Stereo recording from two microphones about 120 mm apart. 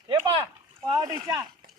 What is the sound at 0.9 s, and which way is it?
Speech, 30° right (ahead or behind).